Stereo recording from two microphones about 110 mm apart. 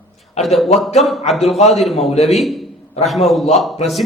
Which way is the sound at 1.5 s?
80° left.